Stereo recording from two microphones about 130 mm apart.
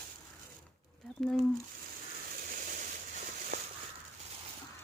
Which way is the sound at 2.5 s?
90° right.